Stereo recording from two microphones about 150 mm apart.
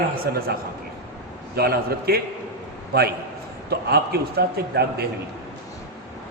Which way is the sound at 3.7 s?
90° right.